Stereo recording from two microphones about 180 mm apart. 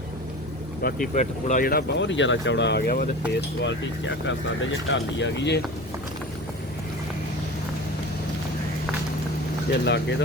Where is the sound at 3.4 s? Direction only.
85° left.